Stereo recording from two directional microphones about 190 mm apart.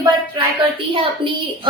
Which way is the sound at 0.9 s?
25° right (ahead or behind).